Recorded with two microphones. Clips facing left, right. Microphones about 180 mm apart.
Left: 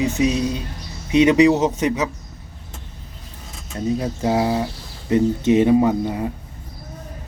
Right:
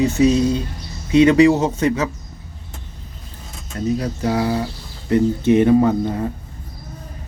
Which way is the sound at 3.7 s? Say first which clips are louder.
Right 1 dB; 25° left (ahead or behind).